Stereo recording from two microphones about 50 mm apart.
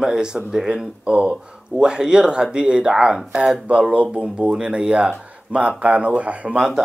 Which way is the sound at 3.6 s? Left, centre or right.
Right.